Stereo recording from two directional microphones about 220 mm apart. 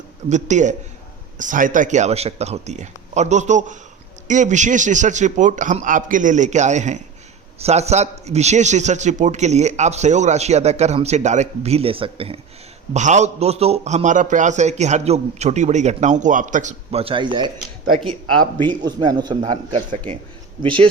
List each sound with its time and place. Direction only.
0.3 s a man's voice: 35° right (ahead or behind)
18.5 s a man's voice: 20° right (ahead or behind)